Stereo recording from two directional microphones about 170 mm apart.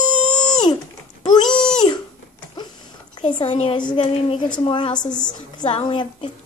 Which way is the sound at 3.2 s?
25° left (ahead or behind).